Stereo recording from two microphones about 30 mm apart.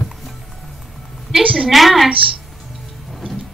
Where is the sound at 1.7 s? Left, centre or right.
Centre.